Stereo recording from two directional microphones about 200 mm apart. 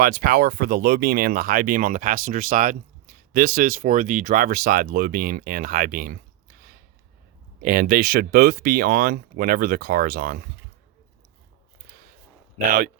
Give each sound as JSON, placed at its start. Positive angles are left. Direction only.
{"t": 0.0, "sound": "speech", "side_deg": -45}